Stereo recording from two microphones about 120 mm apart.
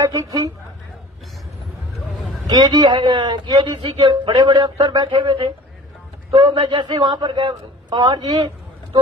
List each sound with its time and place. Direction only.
0.0 s a woman's voice: 30° right (ahead or behind)
2.5 s a man's voice: 35° right (ahead or behind)